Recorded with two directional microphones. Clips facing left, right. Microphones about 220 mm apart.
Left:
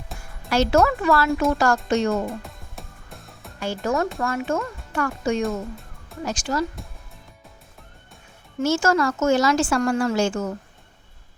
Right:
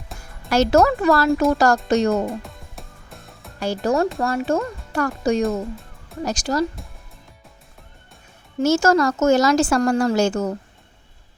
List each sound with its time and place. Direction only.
0.1 s music: centre (ahead or behind)
0.5 s speech: 40° right (ahead or behind)
2.2 s music: centre (ahead or behind)
3.6 s speech: 35° right (ahead or behind)
5.4 s speech: centre (ahead or behind)
6.2 s speech: 40° right (ahead or behind)
8.5 s speech: 40° right (ahead or behind)